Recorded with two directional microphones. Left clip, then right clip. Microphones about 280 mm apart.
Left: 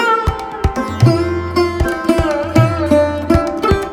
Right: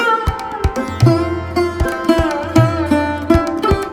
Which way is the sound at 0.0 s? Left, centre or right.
Centre.